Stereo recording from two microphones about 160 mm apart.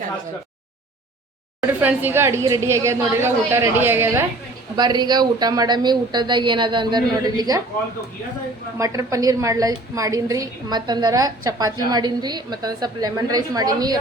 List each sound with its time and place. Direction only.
1.6 s a woman's voice: 10° right (ahead or behind)
4.8 s a woman's voice: 25° right (ahead or behind)
8.8 s a woman's voice: 20° right (ahead or behind)